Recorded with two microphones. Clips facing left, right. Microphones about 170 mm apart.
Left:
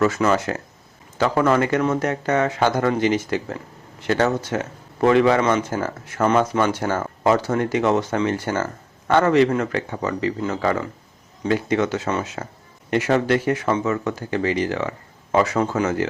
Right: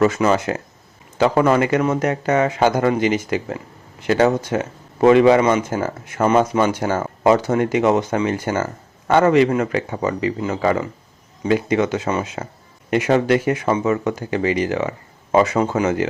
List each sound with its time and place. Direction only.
0.0 s speech: 20° right (ahead or behind)